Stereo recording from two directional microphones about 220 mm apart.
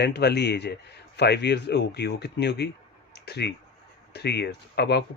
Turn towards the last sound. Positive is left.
turn(degrees=50)  # may be behind; listen again after turning